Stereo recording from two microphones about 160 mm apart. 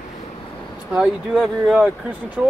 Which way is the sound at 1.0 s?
5° right (ahead or behind).